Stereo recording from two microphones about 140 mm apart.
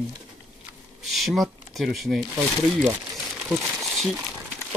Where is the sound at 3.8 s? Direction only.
Centre (ahead or behind).